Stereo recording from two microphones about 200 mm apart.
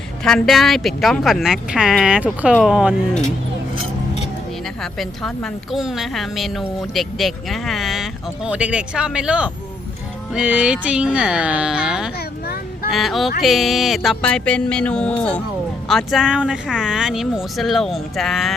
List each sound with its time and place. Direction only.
0.3 s a woman's voice: centre (ahead or behind)
4.8 s a woman's voice: centre (ahead or behind)